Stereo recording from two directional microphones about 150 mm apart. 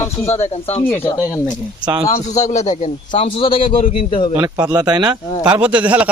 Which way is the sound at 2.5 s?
50° left (ahead or behind).